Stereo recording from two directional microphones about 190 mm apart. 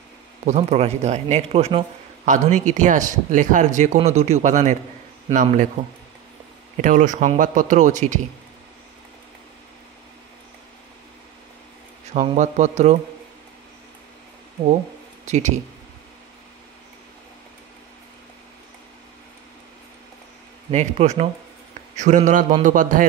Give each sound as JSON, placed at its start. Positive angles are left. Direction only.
{"t": 0.5, "sound": "speech", "side_deg": -35}
{"t": 2.2, "sound": "speech", "side_deg": -40}
{"t": 6.8, "sound": "speech", "side_deg": -45}
{"t": 12.1, "sound": "speech", "side_deg": -35}
{"t": 15.2, "sound": "speech", "side_deg": -40}
{"t": 20.7, "sound": "speech", "side_deg": -35}